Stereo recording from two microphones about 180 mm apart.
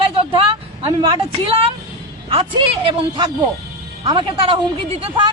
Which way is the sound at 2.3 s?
30° right (ahead or behind).